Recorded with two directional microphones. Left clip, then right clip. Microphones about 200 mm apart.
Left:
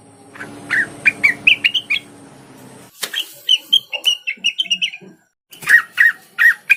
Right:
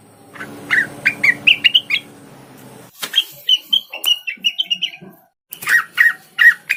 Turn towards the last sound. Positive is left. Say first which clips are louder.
# right 1 dB
turn(degrees=10)  # may be behind; listen again after turning